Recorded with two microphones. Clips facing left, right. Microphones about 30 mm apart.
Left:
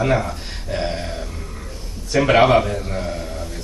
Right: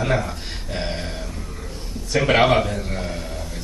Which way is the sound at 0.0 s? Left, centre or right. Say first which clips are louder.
Left 3 dB; centre.